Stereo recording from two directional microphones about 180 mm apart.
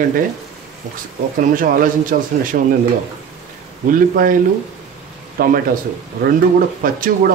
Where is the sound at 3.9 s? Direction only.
50° right (ahead or behind).